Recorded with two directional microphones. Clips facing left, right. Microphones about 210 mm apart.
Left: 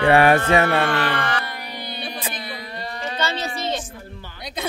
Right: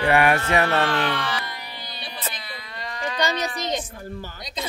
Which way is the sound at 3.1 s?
15° right (ahead or behind).